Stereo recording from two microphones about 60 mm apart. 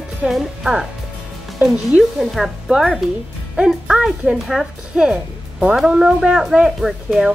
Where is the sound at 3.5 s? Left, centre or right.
Centre.